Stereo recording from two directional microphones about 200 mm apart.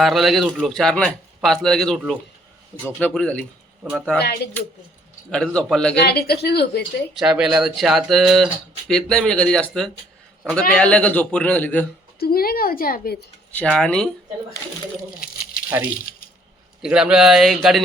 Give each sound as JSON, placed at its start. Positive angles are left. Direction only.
{"t": 0.0, "sound": "a man's voice", "side_deg": 0}
{"t": 5.3, "sound": "a man's voice", "side_deg": 5}
{"t": 6.0, "sound": "a woman's voice", "side_deg": 55}
{"t": 7.1, "sound": "a man's voice", "side_deg": -5}
{"t": 12.2, "sound": "a woman's voice", "side_deg": 50}
{"t": 13.5, "sound": "a man's voice", "side_deg": 5}
{"t": 16.8, "sound": "a man's voice", "side_deg": -5}